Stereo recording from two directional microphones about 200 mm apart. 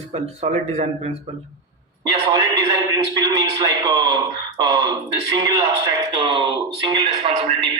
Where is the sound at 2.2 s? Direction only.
20° right (ahead or behind).